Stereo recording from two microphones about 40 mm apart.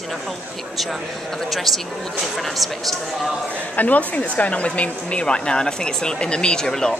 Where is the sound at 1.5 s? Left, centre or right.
Centre.